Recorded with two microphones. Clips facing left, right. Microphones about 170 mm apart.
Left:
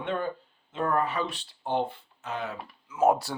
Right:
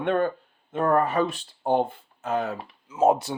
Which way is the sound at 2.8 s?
25° right (ahead or behind).